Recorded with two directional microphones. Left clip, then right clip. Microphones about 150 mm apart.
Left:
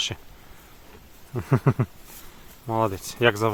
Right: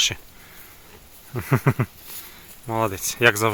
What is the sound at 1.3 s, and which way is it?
Speech, centre (ahead or behind).